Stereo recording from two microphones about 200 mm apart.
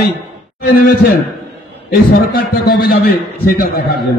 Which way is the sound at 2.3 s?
50° left (ahead or behind).